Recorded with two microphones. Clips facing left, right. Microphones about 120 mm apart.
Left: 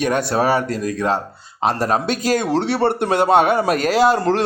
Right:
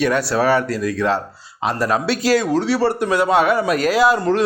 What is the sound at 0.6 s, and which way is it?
Speech, 45° left (ahead or behind).